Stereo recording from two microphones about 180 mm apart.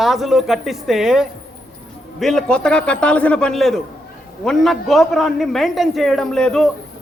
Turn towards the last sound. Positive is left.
turn(degrees=5)  # may be behind; listen again after turning